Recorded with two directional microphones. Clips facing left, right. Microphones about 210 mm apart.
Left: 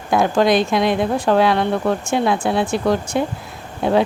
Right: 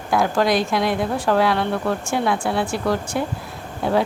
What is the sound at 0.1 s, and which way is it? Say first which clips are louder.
A woman's voice: left 3 dB; 20° left (ahead or behind).